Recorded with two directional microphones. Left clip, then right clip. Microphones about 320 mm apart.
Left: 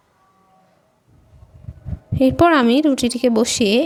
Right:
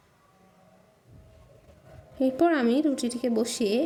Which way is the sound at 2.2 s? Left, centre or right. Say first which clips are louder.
Left 10 dB; left.